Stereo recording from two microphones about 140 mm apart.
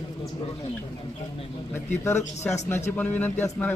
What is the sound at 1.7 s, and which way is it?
Speech, 15° left (ahead or behind).